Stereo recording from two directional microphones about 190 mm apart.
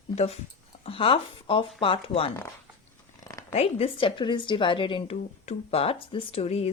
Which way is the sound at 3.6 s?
30° left (ahead or behind).